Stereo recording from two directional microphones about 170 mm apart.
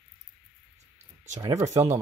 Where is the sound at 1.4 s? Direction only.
20° right (ahead or behind).